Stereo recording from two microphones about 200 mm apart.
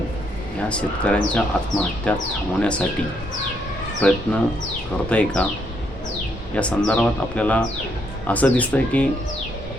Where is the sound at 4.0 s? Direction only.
5° left (ahead or behind).